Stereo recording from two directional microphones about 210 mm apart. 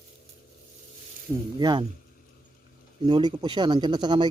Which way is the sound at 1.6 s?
20° right (ahead or behind).